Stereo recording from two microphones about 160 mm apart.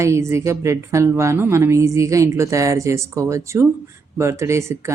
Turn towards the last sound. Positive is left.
turn(degrees=-15)  # may be behind; listen again after turning